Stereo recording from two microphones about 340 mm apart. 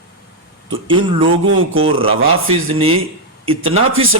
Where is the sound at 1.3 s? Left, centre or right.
Right.